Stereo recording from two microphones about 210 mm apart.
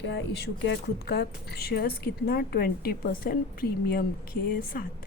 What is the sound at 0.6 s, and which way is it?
A woman's voice, 55° left (ahead or behind).